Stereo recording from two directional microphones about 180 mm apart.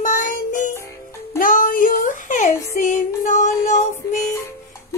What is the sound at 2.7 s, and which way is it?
Music, 45° left (ahead or behind).